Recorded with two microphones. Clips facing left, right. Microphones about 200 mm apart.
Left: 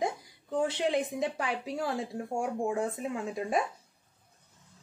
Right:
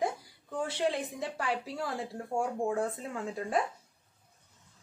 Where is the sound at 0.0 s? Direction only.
20° left (ahead or behind).